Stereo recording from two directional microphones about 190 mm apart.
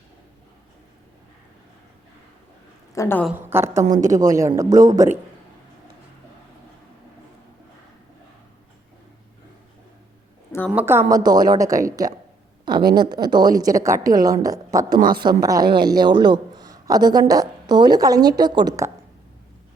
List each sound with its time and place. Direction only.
2.9 s a woman's voice: 15° left (ahead or behind)
3.2 s a man's voice: 10° right (ahead or behind)
3.8 s a woman's voice: 40° right (ahead or behind)
4.2 s a man's voice: 15° right (ahead or behind)
10.7 s a man's voice: 10° right (ahead or behind)
11.1 s a man's voice: 20° right (ahead or behind)
14.9 s speech: 45° right (ahead or behind)
15.2 s a man's voice: 20° right (ahead or behind)